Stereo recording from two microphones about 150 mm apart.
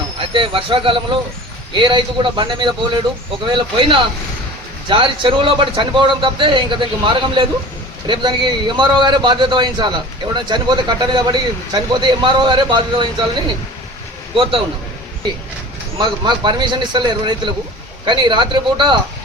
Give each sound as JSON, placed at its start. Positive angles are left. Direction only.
{"t": 0.2, "sound": "speech", "side_deg": -35}
{"t": 16.0, "sound": "speech", "side_deg": -30}